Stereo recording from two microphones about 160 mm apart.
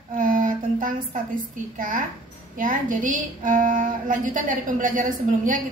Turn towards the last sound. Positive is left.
turn(degrees=-55)  # may be behind; listen again after turning